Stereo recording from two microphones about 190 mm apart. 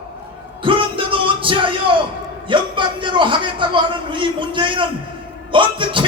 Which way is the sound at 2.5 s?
25° right (ahead or behind).